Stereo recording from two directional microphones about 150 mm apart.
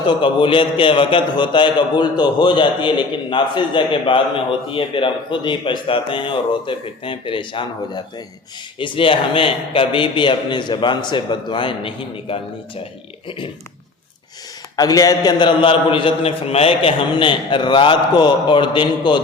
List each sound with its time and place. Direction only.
0.2 s a man's voice: 35° left (ahead or behind)
14.8 s a man's voice: 25° left (ahead or behind)